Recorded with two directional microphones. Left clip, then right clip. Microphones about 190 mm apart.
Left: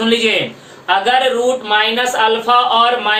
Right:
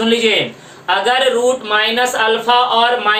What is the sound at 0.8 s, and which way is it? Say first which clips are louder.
Speech: left 1 dB; 15° right (ahead or behind).